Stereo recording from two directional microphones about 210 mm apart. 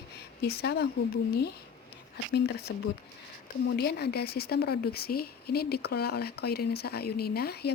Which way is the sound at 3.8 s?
50° left (ahead or behind).